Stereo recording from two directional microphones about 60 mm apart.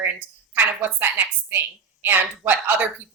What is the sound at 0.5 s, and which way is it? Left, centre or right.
A woman's voice, right.